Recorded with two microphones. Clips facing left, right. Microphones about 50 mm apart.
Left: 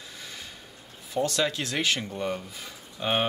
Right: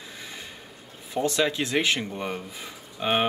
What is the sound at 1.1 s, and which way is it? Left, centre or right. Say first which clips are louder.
Speech: right 2 dB; right.